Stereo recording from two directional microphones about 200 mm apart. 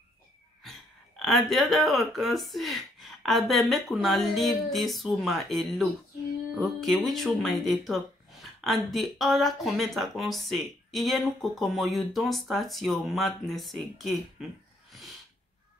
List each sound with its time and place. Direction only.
0.7 s speech: centre (ahead or behind)